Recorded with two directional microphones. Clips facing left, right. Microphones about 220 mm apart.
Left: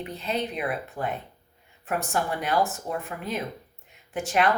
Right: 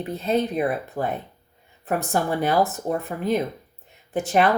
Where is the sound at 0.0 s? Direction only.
40° right (ahead or behind).